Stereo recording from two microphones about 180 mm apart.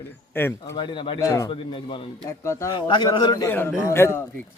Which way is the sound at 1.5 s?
30° left (ahead or behind).